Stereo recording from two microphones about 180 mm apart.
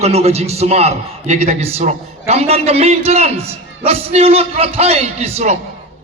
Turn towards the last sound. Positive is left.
turn(degrees=-35)  # may be behind; listen again after turning